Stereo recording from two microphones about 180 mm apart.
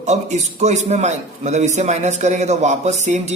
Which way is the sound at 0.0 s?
40° right (ahead or behind).